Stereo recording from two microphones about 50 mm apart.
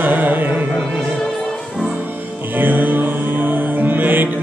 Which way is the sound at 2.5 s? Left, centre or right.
Right.